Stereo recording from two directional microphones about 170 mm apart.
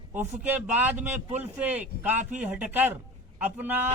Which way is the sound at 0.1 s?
10° right (ahead or behind).